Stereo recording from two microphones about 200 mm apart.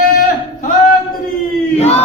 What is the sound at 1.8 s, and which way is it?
Battle cry, 30° left (ahead or behind).